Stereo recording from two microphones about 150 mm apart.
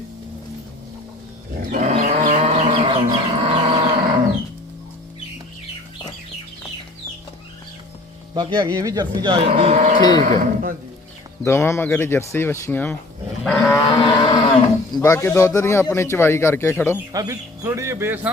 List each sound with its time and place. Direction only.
1.7 s livestock: 55° right (ahead or behind)
3.1 s livestock: 40° right (ahead or behind)
8.3 s speech: 30° right (ahead or behind)
9.5 s livestock: 40° right (ahead or behind)
10.0 s livestock: 25° left (ahead or behind)
10.2 s speech: 65° right (ahead or behind)
11.4 s speech: 20° left (ahead or behind)
13.4 s livestock: 5° left (ahead or behind)
13.8 s cattle: 35° left (ahead or behind)
15.0 s speech: 20° left (ahead or behind)
17.1 s speech: 25° right (ahead or behind)